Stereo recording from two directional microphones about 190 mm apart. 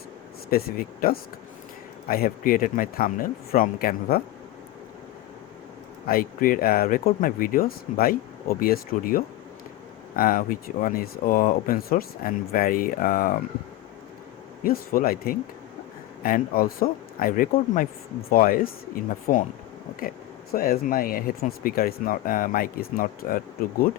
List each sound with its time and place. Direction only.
0.5 s speech: 50° left (ahead or behind)
6.1 s speech: 50° left (ahead or behind)
14.6 s speech: 50° left (ahead or behind)